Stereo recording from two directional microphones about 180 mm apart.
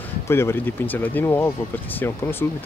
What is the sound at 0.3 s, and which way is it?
Speech, 15° left (ahead or behind).